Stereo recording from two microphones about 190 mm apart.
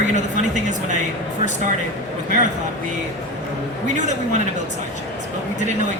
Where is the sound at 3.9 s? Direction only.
40° right (ahead or behind).